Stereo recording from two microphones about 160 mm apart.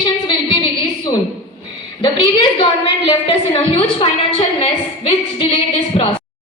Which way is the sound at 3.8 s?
40° left (ahead or behind).